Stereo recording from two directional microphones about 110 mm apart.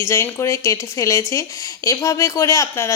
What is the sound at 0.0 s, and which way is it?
Speech, 25° left (ahead or behind).